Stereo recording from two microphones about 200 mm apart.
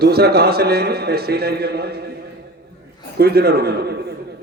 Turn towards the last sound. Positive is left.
turn(degrees=-50)  # may be behind; listen again after turning